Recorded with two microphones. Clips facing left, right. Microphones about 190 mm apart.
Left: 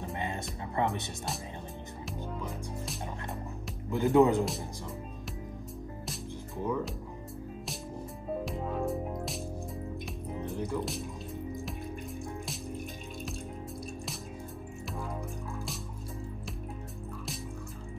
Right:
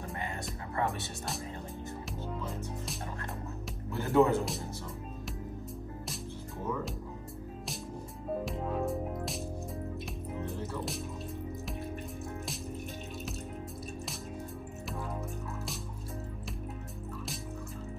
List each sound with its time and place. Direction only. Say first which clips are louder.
0.0 s music: left 3 dB; 20° left (ahead or behind)
3.9 s speech: left 3 dB; 15° left (ahead or behind)
8.5 s music: left 1 dB; centre (ahead or behind)
10.4 s music: left 5 dB; 15° left (ahead or behind)